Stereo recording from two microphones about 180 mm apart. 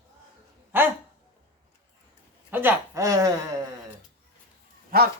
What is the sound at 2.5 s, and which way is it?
Speech, 10° right (ahead or behind).